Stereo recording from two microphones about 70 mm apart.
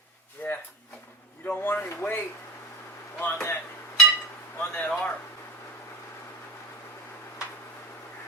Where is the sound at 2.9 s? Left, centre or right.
Left.